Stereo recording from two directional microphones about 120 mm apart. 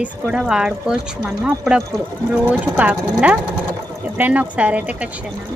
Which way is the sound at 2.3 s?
10° right (ahead or behind).